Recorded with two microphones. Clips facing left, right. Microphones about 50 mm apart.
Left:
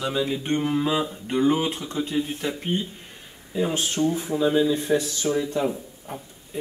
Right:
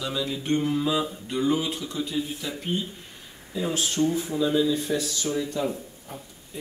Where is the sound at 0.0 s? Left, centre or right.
Left.